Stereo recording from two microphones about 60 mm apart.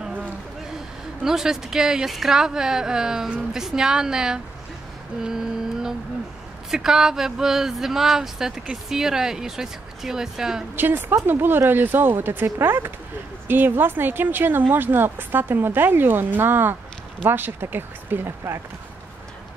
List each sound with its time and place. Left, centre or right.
1.2 s speech: centre
5.2 s music: centre
6.7 s speech: centre
10.8 s speech: right